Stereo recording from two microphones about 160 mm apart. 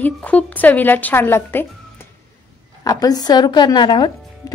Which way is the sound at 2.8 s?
25° left (ahead or behind).